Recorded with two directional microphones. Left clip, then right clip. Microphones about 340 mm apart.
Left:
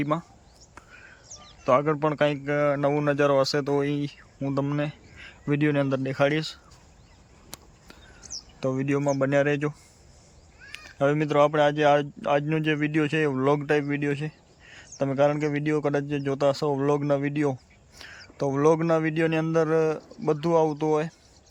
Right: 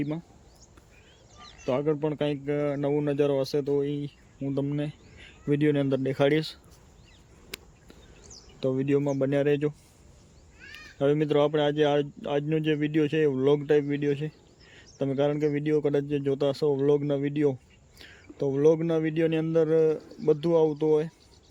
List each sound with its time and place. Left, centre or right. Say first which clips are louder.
1.6 s speech: left 5 dB; centre
8.2 s bird: left 12 dB; left
8.6 s speech: even; centre
10.9 s speech: left 2 dB; centre